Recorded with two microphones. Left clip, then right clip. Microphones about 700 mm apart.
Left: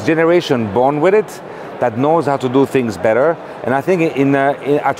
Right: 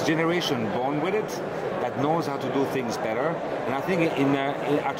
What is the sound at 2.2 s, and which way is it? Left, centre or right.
Speech, left.